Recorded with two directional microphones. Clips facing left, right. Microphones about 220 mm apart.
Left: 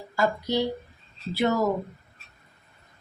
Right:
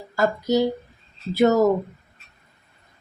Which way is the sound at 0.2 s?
45° right (ahead or behind).